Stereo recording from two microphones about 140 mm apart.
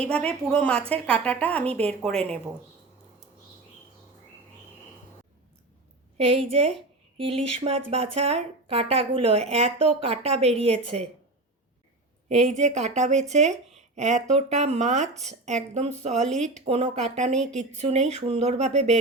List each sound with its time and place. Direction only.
0.0 s a woman's voice: 10° left (ahead or behind)
6.1 s a woman's voice: 45° right (ahead or behind)
12.3 s speech: 55° right (ahead or behind)